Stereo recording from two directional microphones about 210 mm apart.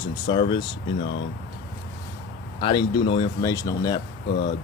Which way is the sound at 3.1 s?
20° left (ahead or behind).